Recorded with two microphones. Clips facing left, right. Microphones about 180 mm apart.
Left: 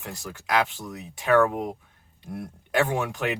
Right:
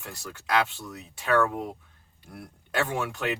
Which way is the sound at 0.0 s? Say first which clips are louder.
Left 3 dB; 20° left (ahead or behind).